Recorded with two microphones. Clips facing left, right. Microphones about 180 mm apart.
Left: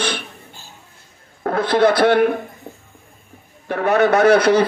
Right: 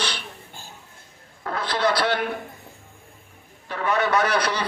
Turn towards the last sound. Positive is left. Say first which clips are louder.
# left 10 dB
turn(degrees=50)  # may be behind; listen again after turning